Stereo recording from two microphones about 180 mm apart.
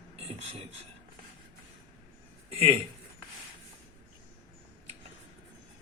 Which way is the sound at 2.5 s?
30° right (ahead or behind).